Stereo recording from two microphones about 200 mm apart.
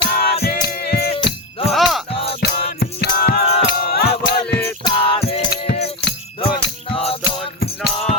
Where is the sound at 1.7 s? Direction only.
Centre (ahead or behind).